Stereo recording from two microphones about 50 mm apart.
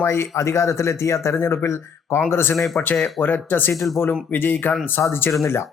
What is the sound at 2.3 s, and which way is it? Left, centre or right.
Speech, left.